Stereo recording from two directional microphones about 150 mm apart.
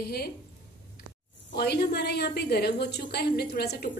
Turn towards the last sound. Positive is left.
turn(degrees=90)